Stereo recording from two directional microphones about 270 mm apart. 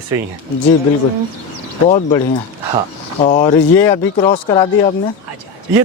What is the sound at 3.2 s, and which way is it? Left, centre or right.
Speech, left.